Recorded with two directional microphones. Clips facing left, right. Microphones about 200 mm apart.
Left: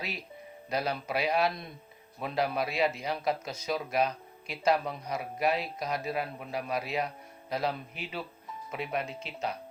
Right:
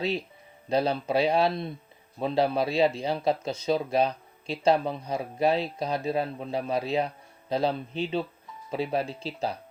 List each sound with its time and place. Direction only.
0.7 s speech: 30° right (ahead or behind)